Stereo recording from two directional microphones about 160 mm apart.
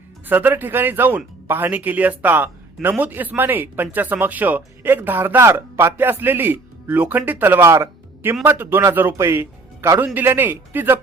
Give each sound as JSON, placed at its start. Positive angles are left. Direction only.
{"t": 0.3, "sound": "speech", "side_deg": -10}